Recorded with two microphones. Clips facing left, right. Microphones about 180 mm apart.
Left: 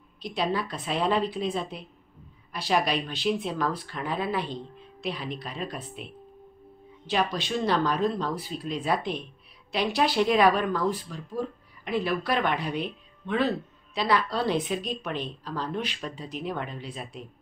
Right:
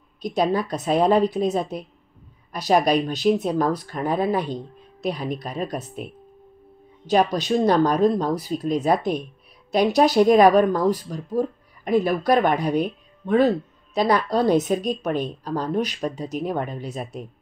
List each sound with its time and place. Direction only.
0.2 s speech: 45° right (ahead or behind)